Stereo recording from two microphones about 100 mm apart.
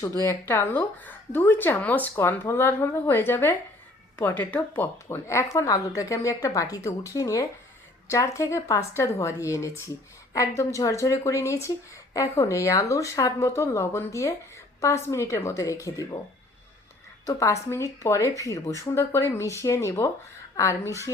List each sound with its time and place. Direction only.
0.0 s speech: 35° left (ahead or behind)
17.2 s speech: 30° left (ahead or behind)